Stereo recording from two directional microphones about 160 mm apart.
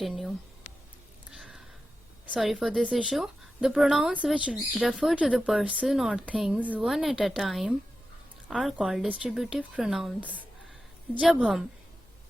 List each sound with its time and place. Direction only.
2.2 s a woman's voice: 5° right (ahead or behind)